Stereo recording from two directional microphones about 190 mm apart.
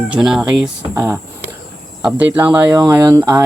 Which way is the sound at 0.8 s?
15° right (ahead or behind).